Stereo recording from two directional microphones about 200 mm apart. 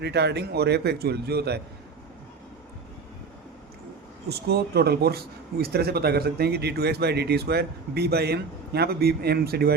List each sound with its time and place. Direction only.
0.0 s a man's voice: 55° right (ahead or behind)
4.3 s speech: 55° right (ahead or behind)